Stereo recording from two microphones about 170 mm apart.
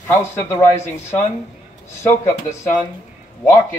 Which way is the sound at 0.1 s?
15° left (ahead or behind).